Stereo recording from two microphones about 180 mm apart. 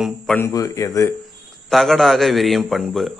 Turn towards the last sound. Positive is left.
turn(degrees=0)  # may be behind; listen again after turning